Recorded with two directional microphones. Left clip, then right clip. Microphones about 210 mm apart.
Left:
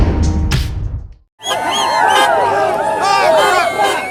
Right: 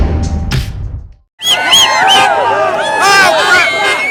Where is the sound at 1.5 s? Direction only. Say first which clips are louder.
Right 7 dB; 35° left (ahead or behind).